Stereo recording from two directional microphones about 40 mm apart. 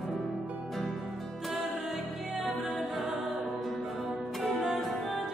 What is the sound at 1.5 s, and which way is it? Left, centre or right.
Music, centre.